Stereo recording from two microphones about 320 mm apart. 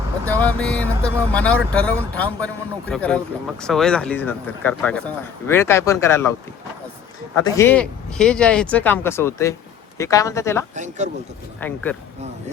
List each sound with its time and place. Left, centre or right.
0.3 s speech: centre
7.3 s speech: centre
10.8 s speech: right
11.6 s speech: centre